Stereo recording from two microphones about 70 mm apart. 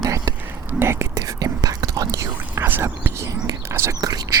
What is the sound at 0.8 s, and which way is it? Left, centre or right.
Speech, right.